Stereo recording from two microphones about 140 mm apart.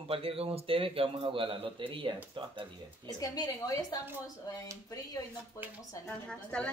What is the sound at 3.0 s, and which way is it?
Speech, 25° left (ahead or behind).